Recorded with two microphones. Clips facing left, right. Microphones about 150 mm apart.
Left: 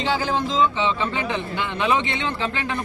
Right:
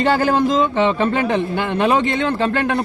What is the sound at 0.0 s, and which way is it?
Speech, 55° right (ahead or behind).